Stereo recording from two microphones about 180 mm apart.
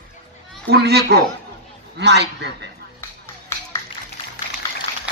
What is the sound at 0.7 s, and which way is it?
Speech, 65° right (ahead or behind).